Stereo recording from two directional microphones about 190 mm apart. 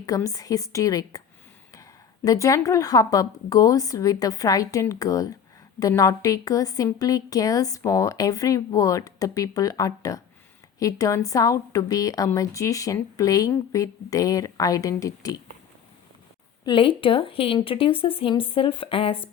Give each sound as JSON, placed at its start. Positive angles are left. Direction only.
{"t": 0.0, "sound": "a woman's voice", "side_deg": 20}
{"t": 2.2, "sound": "a woman's voice", "side_deg": 15}
{"t": 16.6, "sound": "speech", "side_deg": 25}